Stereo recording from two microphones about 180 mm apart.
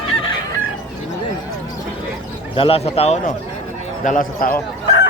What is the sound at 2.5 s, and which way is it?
Speech, 30° left (ahead or behind).